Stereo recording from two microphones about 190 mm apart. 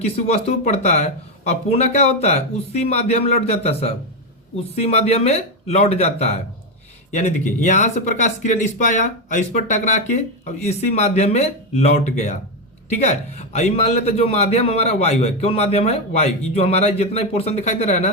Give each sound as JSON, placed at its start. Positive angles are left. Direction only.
{"t": 0.0, "sound": "speech", "side_deg": 35}
{"t": 7.6, "sound": "speech", "side_deg": 40}